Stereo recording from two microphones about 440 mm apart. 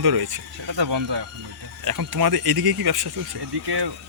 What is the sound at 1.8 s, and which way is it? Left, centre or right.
Speech, right.